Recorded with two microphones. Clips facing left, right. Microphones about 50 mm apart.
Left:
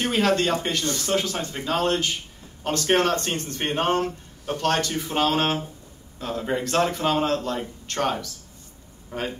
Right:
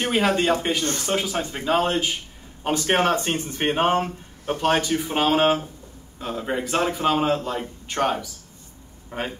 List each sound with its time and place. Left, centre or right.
0.0 s speech: centre
9.1 s speech: right